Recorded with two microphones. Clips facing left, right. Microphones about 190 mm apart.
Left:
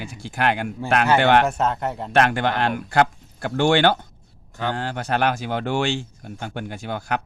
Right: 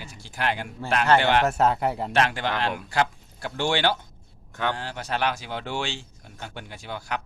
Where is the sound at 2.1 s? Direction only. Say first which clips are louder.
Left 9 dB; 55° left (ahead or behind).